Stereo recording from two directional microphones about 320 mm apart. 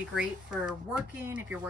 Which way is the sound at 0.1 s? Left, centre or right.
Centre.